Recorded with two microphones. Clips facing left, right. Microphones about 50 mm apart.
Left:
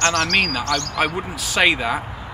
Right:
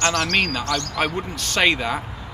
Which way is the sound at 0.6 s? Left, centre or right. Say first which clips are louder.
Left 2 dB; left.